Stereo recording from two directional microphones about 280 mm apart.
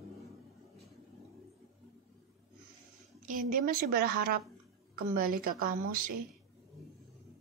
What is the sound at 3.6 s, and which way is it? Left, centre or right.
Speech, right.